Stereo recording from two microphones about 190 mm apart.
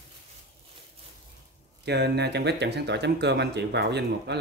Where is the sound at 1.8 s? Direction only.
60° right (ahead or behind).